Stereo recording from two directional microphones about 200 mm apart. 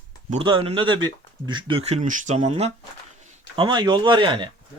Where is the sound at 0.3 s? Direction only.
25° right (ahead or behind).